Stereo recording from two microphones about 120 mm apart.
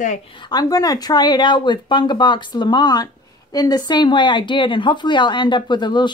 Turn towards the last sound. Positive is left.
turn(degrees=40)  # may be behind; listen again after turning